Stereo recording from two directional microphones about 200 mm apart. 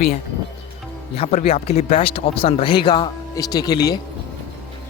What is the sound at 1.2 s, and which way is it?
Speech, 30° left (ahead or behind).